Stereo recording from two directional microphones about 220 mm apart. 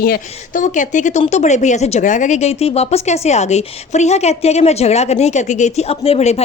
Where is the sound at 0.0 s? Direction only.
40° left (ahead or behind).